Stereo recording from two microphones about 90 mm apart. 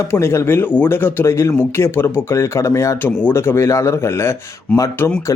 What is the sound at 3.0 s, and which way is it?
A man's voice, 20° left (ahead or behind).